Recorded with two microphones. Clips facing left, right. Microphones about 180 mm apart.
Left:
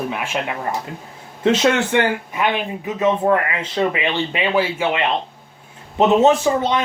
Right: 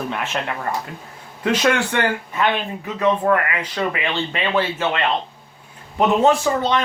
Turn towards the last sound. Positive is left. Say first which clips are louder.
# left 1 dB
turn(degrees=20)  # may be behind; listen again after turning